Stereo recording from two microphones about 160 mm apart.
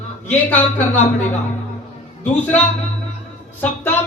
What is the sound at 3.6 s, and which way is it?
Speech, 10° left (ahead or behind).